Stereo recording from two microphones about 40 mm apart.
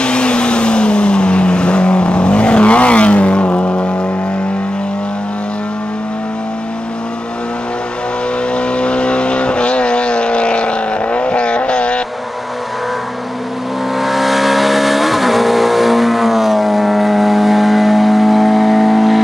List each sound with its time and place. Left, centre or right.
0.0 s vehicle: left
8.5 s vehicle: left
13.9 s vehicle: centre